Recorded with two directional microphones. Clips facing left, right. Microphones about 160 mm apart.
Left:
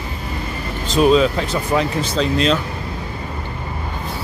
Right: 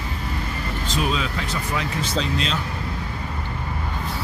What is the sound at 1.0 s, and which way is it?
Speech, 30° left (ahead or behind).